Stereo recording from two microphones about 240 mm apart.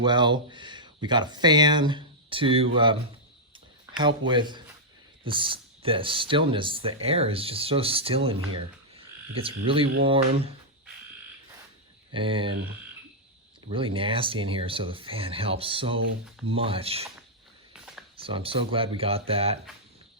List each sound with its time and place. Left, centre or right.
0.0 s speech: centre
4.3 s speech: centre
9.4 s speech: right
12.1 s speech: right
13.7 s speech: right
18.2 s speech: right